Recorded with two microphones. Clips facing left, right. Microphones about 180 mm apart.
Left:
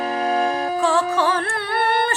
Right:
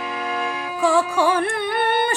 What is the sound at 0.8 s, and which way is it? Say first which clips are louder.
Music: right 3 dB; 10° right (ahead or behind).